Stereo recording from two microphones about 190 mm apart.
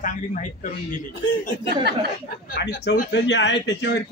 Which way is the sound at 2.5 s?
60° left (ahead or behind).